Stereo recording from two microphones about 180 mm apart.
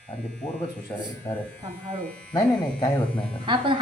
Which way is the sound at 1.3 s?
10° left (ahead or behind).